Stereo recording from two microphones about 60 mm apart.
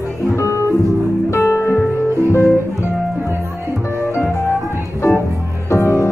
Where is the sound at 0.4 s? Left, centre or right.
Left.